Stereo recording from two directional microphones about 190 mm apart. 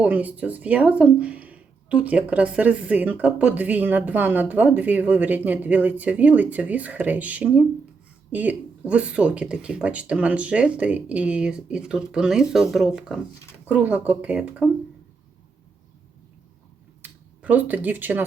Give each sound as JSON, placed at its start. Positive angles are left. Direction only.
{"t": 0.0, "sound": "speech", "side_deg": -10}
{"t": 17.0, "sound": "speech", "side_deg": -10}